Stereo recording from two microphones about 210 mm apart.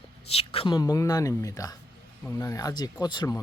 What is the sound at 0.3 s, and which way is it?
Speech, 25° left (ahead or behind).